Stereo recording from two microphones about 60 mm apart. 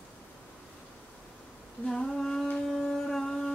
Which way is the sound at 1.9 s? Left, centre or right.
Centre.